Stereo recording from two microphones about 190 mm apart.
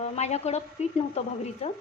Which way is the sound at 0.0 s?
35° left (ahead or behind).